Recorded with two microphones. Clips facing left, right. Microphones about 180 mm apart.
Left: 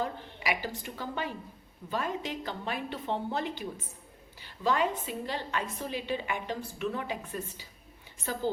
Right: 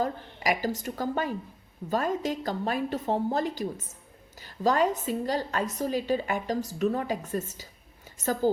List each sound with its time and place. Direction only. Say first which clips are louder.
0.0 s a woman's voice: right 5 dB; 40° right (ahead or behind)